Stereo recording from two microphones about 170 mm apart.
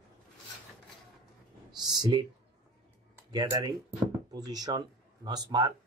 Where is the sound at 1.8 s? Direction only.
25° right (ahead or behind).